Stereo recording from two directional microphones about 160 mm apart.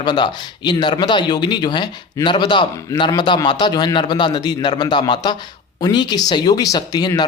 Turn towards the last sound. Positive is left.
turn(degrees=25)  # may be behind; listen again after turning